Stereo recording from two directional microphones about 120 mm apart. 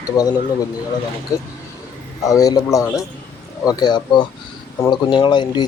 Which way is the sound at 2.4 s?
30° left (ahead or behind).